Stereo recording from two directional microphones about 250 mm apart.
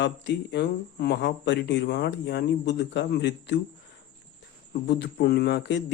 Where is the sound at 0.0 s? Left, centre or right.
Left.